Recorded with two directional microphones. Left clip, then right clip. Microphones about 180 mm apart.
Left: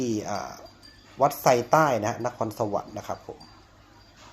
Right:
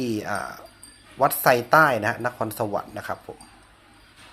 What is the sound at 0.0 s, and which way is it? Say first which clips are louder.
Speech: right 2 dB; 5° left (ahead or behind).